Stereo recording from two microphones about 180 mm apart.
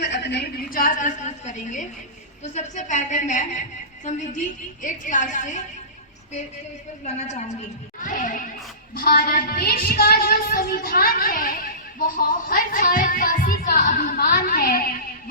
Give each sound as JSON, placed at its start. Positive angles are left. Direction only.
{"t": 0.0, "sound": "a woman's voice", "side_deg": 75}
{"t": 8.0, "sound": "a woman's voice", "side_deg": 45}
{"t": 9.0, "sound": "a woman's voice", "side_deg": 55}